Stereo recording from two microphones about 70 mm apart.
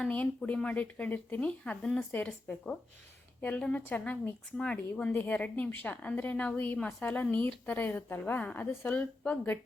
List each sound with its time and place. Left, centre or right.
0.0 s a woman's voice: centre